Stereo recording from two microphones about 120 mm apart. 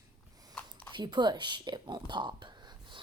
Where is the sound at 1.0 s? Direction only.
40° right (ahead or behind).